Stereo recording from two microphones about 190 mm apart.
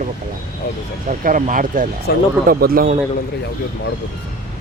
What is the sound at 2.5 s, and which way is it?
Speech, 50° right (ahead or behind).